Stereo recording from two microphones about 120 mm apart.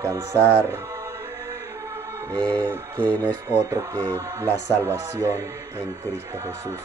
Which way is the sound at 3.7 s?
30° right (ahead or behind).